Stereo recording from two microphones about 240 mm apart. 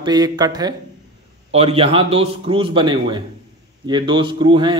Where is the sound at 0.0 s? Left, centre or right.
Centre.